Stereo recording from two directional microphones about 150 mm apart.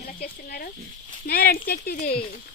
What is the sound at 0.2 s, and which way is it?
Speech, 80° left.